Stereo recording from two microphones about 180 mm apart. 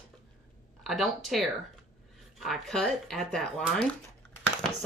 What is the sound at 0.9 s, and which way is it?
Speech, centre (ahead or behind).